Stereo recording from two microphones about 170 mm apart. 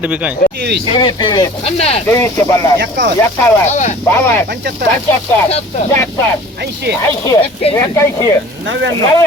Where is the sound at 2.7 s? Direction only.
70° right (ahead or behind).